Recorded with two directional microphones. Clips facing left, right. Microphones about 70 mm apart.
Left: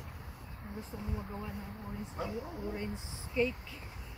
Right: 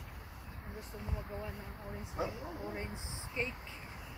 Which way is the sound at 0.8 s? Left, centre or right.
Centre.